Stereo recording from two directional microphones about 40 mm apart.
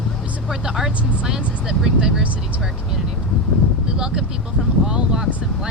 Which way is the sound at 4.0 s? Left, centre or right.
Right.